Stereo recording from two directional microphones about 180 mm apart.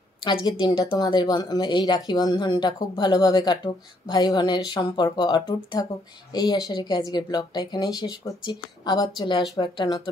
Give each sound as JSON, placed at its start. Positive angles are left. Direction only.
{"t": 0.2, "sound": "speech", "side_deg": 25}